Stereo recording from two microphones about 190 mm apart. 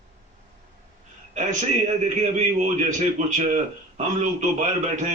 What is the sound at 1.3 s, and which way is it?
A man's voice, 40° right (ahead or behind).